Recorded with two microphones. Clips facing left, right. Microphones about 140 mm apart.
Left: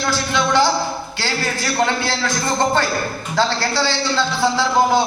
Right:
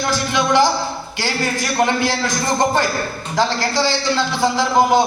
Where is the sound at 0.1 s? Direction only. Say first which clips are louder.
Right 1 dB; 15° right (ahead or behind).